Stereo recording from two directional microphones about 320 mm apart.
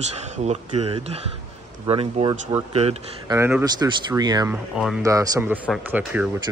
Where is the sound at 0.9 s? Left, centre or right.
Centre.